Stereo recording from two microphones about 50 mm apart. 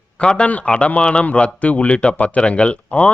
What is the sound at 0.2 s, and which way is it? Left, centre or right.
A man's voice, left.